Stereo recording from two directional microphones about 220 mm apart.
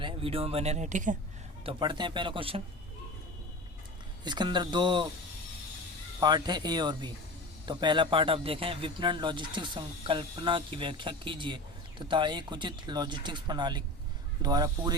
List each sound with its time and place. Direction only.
0.0 s speech: 25° right (ahead or behind)
1.6 s a man's voice: 20° right (ahead or behind)
4.2 s a man's voice: 20° right (ahead or behind)
6.1 s a man's voice: 20° right (ahead or behind)